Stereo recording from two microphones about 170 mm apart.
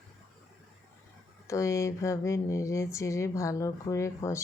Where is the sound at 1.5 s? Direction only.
15° left (ahead or behind).